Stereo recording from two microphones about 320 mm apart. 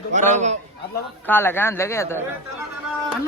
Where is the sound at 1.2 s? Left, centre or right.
Centre.